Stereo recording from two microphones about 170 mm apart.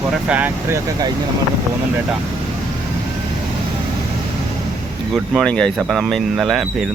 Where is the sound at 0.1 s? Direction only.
10° right (ahead or behind).